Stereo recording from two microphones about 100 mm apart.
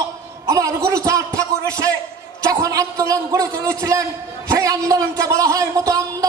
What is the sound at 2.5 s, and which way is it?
Speech, 35° right (ahead or behind).